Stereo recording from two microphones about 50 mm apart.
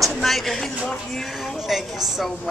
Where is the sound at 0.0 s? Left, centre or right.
Centre.